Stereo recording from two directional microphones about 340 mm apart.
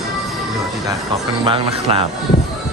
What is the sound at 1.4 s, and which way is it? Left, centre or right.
Speech, centre.